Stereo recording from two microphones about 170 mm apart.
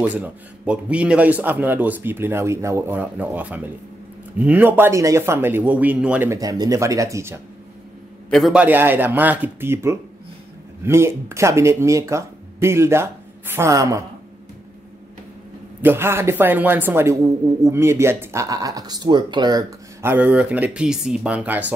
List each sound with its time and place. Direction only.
0.0 s speech: 5° right (ahead or behind)
8.3 s speech: centre (ahead or behind); by 14.0 s 20° right (ahead or behind)
15.8 s speech: 15° right (ahead or behind)
20.0 s speech: 10° right (ahead or behind)